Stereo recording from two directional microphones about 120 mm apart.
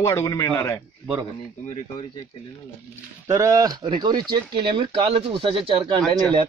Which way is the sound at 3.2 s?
25° right (ahead or behind).